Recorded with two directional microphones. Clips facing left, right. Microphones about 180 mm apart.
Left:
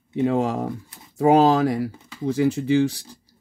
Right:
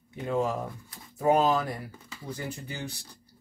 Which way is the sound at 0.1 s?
90° left.